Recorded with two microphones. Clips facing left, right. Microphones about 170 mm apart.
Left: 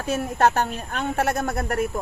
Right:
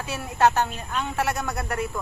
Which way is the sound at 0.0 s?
50° left (ahead or behind).